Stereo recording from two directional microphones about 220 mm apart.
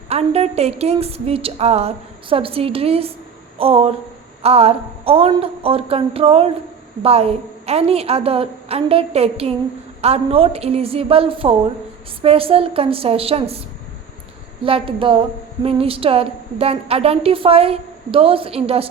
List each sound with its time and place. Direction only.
0.1 s a woman's voice: 30° right (ahead or behind)
14.6 s a woman's voice: 25° right (ahead or behind)